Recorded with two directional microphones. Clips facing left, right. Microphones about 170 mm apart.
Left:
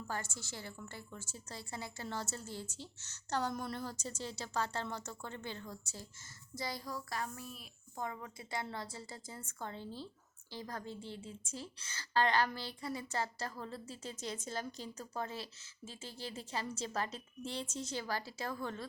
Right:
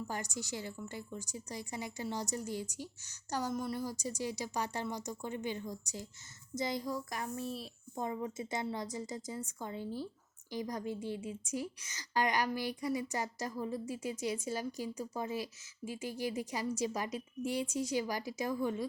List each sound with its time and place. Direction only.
0.1 s a woman's voice: 15° right (ahead or behind)